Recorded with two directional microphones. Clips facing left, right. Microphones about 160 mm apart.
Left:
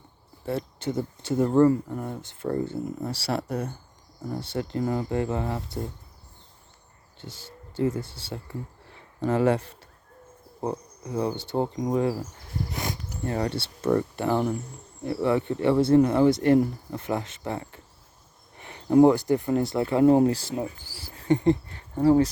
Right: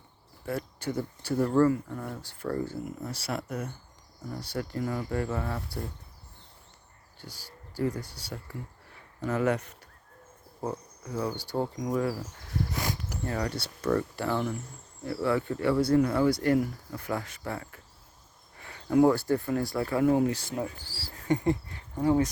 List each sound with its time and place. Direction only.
0.4 s speech: 25° left (ahead or behind)
7.2 s speech: 25° left (ahead or behind)
12.7 s a sound: 20° left (ahead or behind)
13.2 s speech: 25° left (ahead or behind)
20.6 s speech: 20° left (ahead or behind)
21.7 s insect: 35° left (ahead or behind)